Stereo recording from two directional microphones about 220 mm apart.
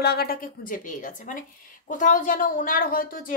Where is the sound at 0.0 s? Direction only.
45° left (ahead or behind).